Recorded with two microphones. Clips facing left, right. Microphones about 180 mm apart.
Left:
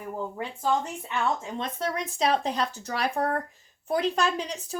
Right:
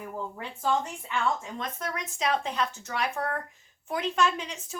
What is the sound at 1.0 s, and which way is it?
Speech, 25° left (ahead or behind).